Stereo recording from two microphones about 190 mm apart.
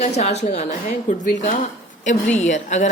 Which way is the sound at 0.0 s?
35° left (ahead or behind).